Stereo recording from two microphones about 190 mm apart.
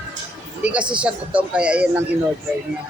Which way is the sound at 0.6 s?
5° right (ahead or behind).